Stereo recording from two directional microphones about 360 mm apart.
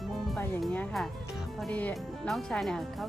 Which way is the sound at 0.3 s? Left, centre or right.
Centre.